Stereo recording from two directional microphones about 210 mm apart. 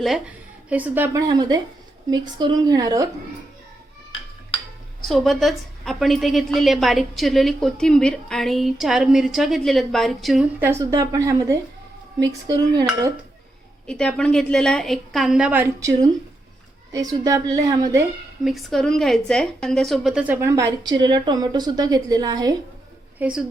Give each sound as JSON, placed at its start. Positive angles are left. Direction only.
{"t": 0.0, "sound": "a woman's voice", "side_deg": -5}
{"t": 5.0, "sound": "a woman's voice", "side_deg": 0}
{"t": 12.5, "sound": "cutlery", "side_deg": -20}
{"t": 13.8, "sound": "a woman's voice", "side_deg": 5}
{"t": 18.4, "sound": "a woman's voice", "side_deg": 0}